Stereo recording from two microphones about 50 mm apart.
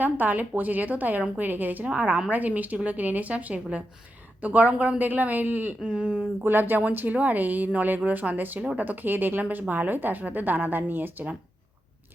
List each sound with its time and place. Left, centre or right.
0.0 s a woman's voice: right
5.8 s speech: right
6.4 s a woman's voice: right